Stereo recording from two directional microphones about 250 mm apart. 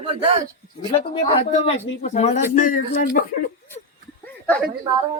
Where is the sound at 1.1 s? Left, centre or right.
Left.